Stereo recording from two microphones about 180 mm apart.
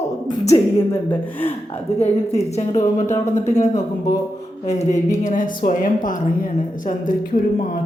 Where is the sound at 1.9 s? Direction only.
35° left (ahead or behind).